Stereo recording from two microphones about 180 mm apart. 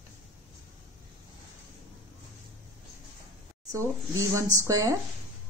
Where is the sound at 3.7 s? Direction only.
15° right (ahead or behind).